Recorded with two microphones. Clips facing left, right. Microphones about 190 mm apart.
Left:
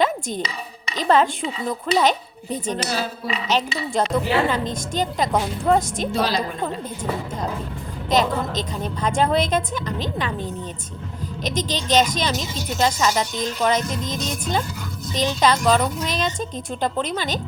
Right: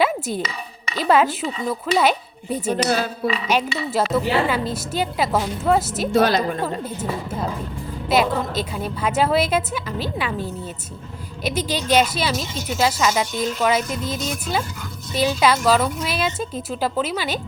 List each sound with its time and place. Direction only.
0.0 s music: 5° right (ahead or behind)
0.9 s speech: 10° right (ahead or behind)
6.1 s a woman's voice: 50° right (ahead or behind)
8.1 s speech: 10° right (ahead or behind)